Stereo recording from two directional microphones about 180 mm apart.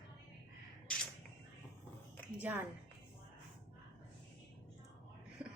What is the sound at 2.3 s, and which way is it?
Speech, 10° right (ahead or behind).